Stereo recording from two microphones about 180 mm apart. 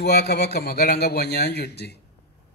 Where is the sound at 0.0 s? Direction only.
65° left (ahead or behind).